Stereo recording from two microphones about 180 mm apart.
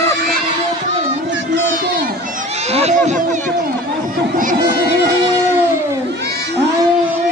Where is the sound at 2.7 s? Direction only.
35° right (ahead or behind).